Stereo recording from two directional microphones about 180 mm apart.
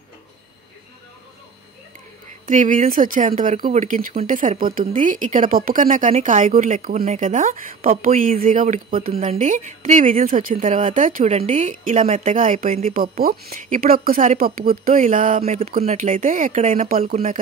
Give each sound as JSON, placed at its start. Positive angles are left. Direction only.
{"t": 2.4, "sound": "speech", "side_deg": -45}
{"t": 10.5, "sound": "speech", "side_deg": -35}